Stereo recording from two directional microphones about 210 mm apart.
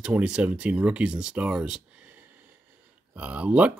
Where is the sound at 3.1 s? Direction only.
5° right (ahead or behind).